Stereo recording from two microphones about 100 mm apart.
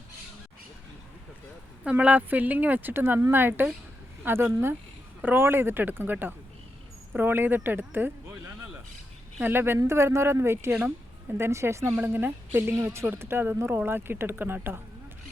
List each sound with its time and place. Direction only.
1.8 s speech: 15° right (ahead or behind)